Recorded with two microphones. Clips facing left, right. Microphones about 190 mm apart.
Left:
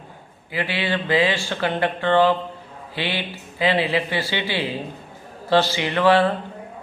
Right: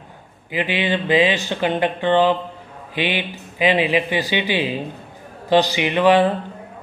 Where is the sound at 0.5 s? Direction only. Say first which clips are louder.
Right 3 dB; 20° right (ahead or behind).